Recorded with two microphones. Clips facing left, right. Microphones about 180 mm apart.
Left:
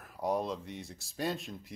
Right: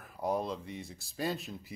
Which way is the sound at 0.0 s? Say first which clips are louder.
Left 1 dB; centre (ahead or behind).